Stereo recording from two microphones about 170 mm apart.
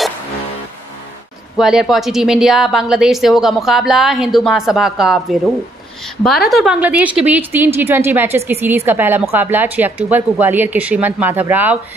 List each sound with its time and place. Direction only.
1.6 s a woman's voice: 5° right (ahead or behind)
6.5 s a woman's voice: 5° right (ahead or behind)